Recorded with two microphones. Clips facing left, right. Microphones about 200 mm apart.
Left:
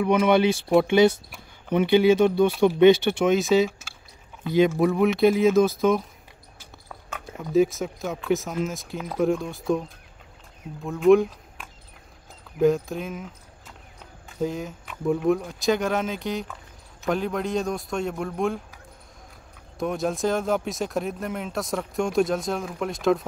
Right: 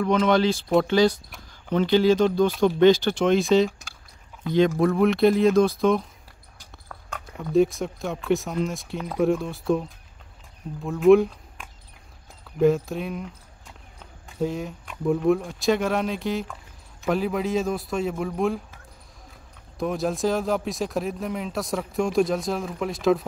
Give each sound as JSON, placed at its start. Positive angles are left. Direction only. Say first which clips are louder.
{"t": 0.0, "sound": "speech", "louder": "left 1 dB", "side_deg": 10}
{"t": 0.8, "sound": "speech", "louder": "left 2 dB", "side_deg": 25}
{"t": 1.7, "sound": "speech", "louder": "left 1 dB", "side_deg": 10}
{"t": 14.4, "sound": "speech", "louder": "right 1 dB", "side_deg": 0}
{"t": 19.8, "sound": "speech", "louder": "right 1 dB", "side_deg": 0}